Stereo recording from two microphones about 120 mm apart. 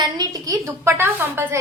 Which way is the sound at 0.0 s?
35° right (ahead or behind).